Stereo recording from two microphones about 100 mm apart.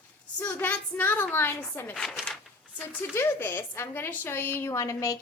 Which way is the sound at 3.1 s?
25° left (ahead or behind).